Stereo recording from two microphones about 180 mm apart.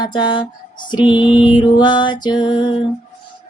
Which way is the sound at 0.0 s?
25° left (ahead or behind).